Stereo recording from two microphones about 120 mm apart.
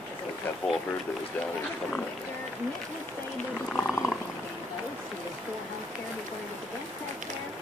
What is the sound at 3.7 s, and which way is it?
Speech, 15° left (ahead or behind).